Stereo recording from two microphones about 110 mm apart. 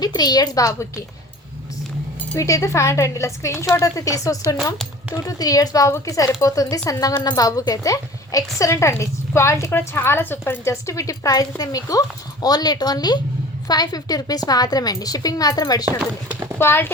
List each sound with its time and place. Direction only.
0.0 s a woman's voice: 35° left (ahead or behind)
2.4 s a woman's voice: 30° left (ahead or behind)
16.0 s speech: 15° right (ahead or behind)
16.6 s speech: 20° left (ahead or behind)